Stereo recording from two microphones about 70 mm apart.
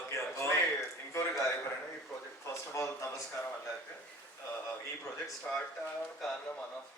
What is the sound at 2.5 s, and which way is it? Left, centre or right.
Speech, left.